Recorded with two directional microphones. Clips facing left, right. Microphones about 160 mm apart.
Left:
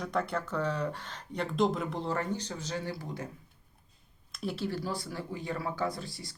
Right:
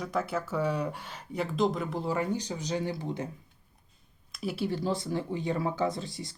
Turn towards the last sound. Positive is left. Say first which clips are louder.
# right 4 dB
turn(degrees=-20)  # may be behind; listen again after turning